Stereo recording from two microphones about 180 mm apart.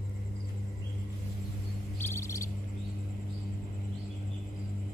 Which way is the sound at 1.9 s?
15° left (ahead or behind).